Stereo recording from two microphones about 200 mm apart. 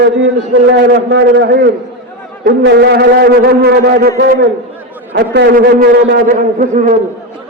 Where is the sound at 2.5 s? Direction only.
55° right (ahead or behind).